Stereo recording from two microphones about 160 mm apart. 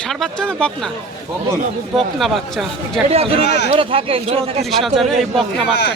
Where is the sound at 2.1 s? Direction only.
Centre (ahead or behind).